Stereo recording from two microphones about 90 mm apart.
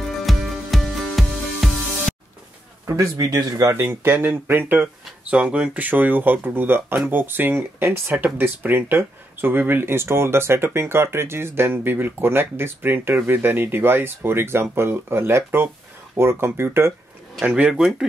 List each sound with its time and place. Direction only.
0.2 s music: centre (ahead or behind)
2.9 s speech: 35° right (ahead or behind)
3.7 s speech: 25° right (ahead or behind)
5.3 s speech: 15° right (ahead or behind); by 16.9 s 30° right (ahead or behind)
17.4 s speech: 10° right (ahead or behind)